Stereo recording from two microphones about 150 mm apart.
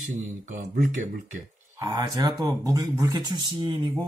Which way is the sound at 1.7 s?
30° right (ahead or behind).